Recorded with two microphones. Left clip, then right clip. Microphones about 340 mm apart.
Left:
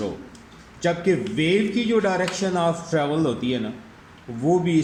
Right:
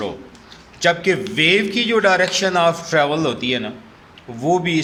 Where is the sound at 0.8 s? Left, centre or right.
Right.